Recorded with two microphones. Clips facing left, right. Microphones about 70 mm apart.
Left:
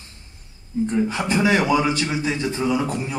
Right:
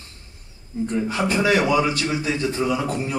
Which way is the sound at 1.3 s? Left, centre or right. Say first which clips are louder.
Even; left.